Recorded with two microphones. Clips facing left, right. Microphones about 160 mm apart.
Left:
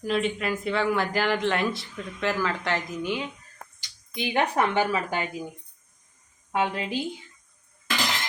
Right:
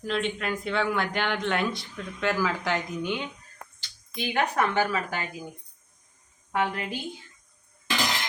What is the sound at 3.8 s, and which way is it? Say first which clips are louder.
A woman's voice: left 1 dB; 25° left (ahead or behind).